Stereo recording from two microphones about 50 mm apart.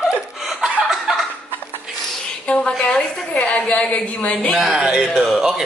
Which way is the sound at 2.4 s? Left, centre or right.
Left.